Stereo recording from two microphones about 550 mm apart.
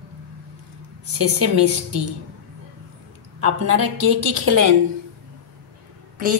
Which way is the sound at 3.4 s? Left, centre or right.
Right.